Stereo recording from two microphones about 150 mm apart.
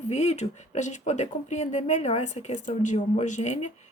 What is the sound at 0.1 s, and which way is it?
Speech, 45° left (ahead or behind).